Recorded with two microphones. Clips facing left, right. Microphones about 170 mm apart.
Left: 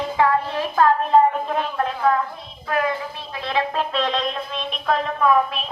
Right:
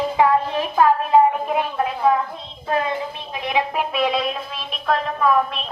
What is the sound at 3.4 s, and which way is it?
A man's voice, 15° right (ahead or behind).